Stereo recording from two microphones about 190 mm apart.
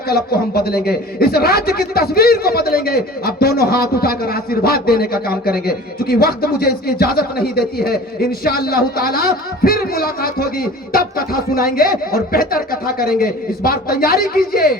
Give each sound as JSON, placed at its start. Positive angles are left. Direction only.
{"t": 0.1, "sound": "a man's voice", "side_deg": 55}